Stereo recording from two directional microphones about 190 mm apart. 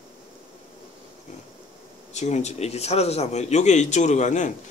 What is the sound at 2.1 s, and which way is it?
A man's voice, 35° left (ahead or behind).